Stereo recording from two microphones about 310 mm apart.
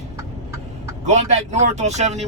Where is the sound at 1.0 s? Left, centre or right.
Right.